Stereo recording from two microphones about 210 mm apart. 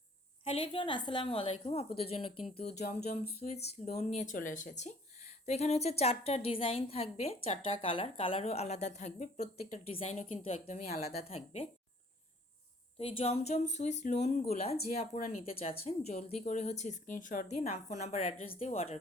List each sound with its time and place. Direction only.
0.4 s a woman's voice: 25° left (ahead or behind)
13.0 s a woman's voice: 25° left (ahead or behind)